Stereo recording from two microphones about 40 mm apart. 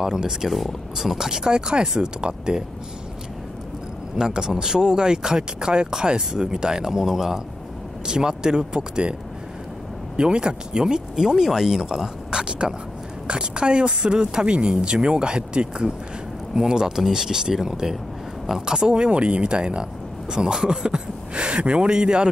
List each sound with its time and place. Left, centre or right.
0.0 s speech: centre
0.5 s speech: centre
4.2 s speech: centre
10.1 s speech: right